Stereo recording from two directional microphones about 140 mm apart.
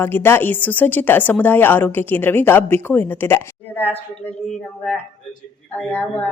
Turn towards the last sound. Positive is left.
turn(degrees=10)  # may be behind; listen again after turning